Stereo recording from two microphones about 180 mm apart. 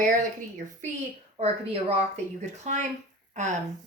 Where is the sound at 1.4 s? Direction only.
35° right (ahead or behind).